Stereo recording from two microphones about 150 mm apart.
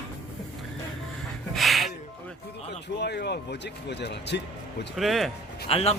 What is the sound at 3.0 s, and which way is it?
Speech, 90° left.